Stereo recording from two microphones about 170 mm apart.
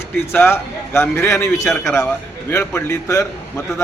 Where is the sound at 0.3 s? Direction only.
15° left (ahead or behind).